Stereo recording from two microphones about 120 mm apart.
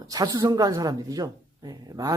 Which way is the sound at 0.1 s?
35° right (ahead or behind).